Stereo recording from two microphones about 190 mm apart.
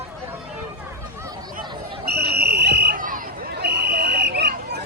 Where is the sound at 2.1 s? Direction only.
55° right (ahead or behind).